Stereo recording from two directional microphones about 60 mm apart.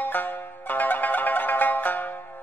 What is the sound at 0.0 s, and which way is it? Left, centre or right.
Zither, left.